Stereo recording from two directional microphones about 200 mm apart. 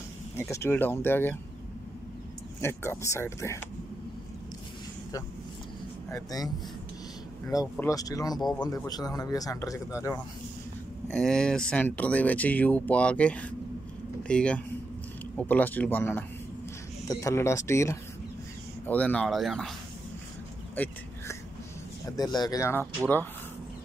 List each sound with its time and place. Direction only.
0.4 s speech: 10° left (ahead or behind)
2.6 s speech: 10° left (ahead or behind)
6.0 s speech: 15° left (ahead or behind)
7.7 s speech: 15° left (ahead or behind)
8.4 s speech: centre (ahead or behind)
8.7 s speech: 20° left (ahead or behind)
11.1 s speech: 5° left (ahead or behind)
20.7 s a sound: 10° left (ahead or behind)
22.0 s speech: 20° left (ahead or behind)